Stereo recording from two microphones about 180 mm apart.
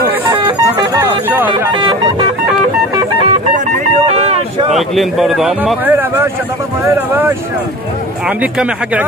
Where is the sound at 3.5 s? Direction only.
40° right (ahead or behind).